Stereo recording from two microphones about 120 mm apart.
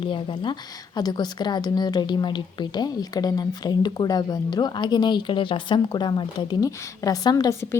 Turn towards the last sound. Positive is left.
turn(degrees=20)  # may be behind; listen again after turning